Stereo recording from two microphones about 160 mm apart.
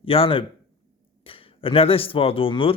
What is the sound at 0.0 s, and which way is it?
A man's voice, 35° left (ahead or behind).